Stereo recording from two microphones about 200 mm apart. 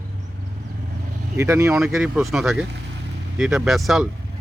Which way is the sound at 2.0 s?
Centre (ahead or behind).